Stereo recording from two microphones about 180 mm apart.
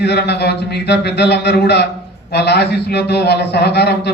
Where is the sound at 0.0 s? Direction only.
70° left (ahead or behind).